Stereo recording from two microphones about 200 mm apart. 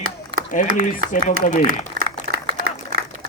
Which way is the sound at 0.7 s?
40° left (ahead or behind).